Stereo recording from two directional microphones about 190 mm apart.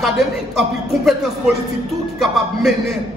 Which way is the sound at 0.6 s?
Centre (ahead or behind).